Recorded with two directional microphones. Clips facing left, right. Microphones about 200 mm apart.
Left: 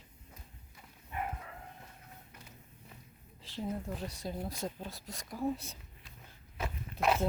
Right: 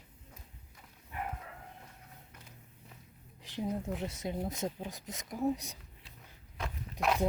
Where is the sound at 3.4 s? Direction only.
20° right (ahead or behind).